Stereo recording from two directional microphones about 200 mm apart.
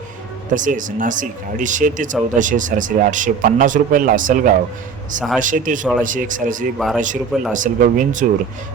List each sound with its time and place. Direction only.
0.5 s speech: 40° right (ahead or behind)
6.7 s speech: centre (ahead or behind)
7.5 s speech: 40° right (ahead or behind)